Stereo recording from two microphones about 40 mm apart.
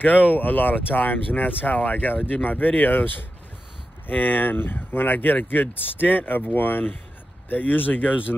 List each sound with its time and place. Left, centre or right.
0.0 s speech: left